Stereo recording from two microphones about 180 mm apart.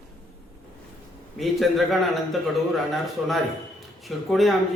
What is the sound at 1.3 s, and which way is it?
A man's voice, centre (ahead or behind).